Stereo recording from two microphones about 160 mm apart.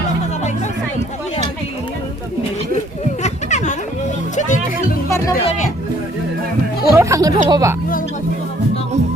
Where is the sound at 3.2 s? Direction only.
45° left (ahead or behind).